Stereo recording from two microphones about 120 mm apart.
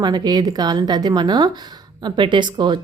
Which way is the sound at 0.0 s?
35° right (ahead or behind).